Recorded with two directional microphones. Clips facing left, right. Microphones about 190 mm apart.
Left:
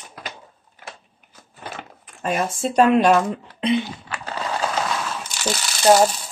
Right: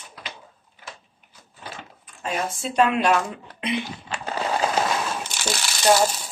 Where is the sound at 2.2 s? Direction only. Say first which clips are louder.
Left 5 dB; 50° left (ahead or behind).